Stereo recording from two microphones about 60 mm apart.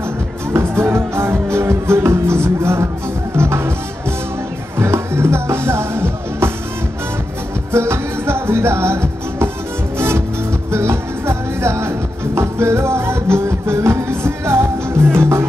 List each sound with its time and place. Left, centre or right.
0.5 s music: right
4.7 s music: right
7.7 s music: right